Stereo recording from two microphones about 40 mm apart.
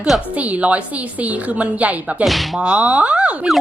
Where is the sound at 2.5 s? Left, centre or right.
Right.